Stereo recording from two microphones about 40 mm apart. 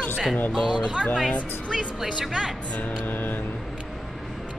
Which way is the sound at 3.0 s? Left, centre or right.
Left.